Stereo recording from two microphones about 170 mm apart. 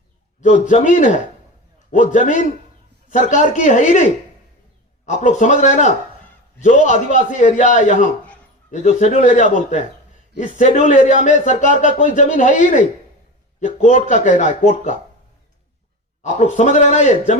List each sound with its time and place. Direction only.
0.4 s speech: 45° left (ahead or behind)
16.2 s speech: 45° left (ahead or behind)